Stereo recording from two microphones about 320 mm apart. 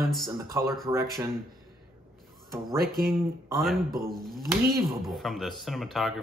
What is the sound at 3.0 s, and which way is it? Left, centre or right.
Speech, centre.